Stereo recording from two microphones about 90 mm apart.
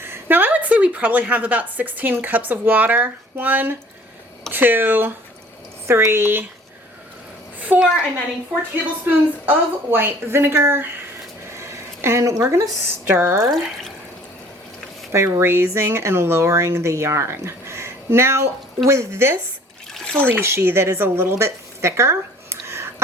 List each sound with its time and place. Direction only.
0.0 s a woman's voice: 25° right (ahead or behind)
7.7 s a woman's voice: 20° right (ahead or behind)
9.0 s a woman's voice: 20° right (ahead or behind)
15.1 s a woman's voice: 30° right (ahead or behind)